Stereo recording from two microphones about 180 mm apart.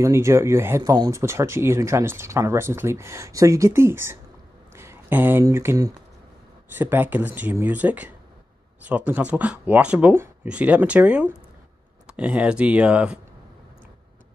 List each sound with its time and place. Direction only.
0.0 s speech: 15° right (ahead or behind)